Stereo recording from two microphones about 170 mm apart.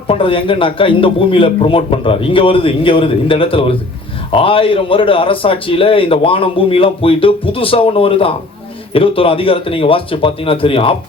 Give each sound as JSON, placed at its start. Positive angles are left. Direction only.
{"t": 0.1, "sound": "a man's voice", "side_deg": 30}